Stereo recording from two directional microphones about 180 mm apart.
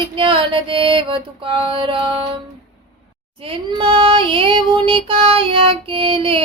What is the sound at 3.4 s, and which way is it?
Child singing, 30° right (ahead or behind).